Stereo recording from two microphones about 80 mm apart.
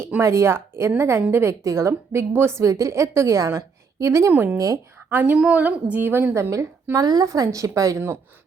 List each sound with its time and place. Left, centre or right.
0.2 s a woman's voice: right
4.3 s a woman's voice: centre
4.5 s a woman's voice: right
5.0 s speech: right
5.4 s a woman's voice: centre
5.6 s a woman's voice: right
6.9 s a woman's voice: right